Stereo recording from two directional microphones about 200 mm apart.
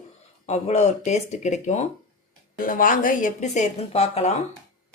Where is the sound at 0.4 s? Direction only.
35° left (ahead or behind).